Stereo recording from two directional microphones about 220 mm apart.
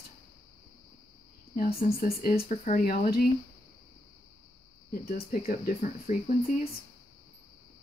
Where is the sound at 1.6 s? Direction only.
40° left (ahead or behind).